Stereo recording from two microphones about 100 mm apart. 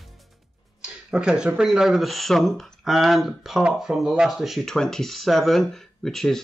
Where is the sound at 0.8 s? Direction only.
10° right (ahead or behind).